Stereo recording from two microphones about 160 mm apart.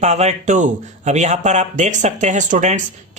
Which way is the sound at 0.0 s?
45° right (ahead or behind).